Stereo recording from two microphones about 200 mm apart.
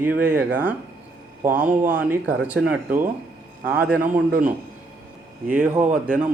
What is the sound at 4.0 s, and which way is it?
Speech, 40° right (ahead or behind).